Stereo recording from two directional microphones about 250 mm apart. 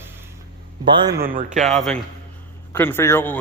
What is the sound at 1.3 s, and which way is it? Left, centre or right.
Speech, right.